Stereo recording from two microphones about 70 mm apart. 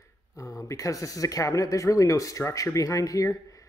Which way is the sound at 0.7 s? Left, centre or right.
Left.